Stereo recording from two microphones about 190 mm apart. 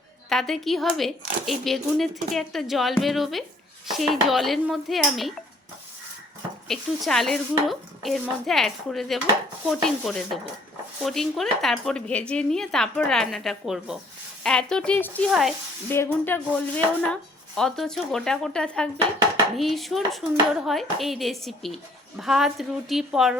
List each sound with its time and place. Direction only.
0.3 s a woman's voice: centre (ahead or behind)
6.7 s a woman's voice: centre (ahead or behind)
15.9 s a woman's voice: 10° left (ahead or behind)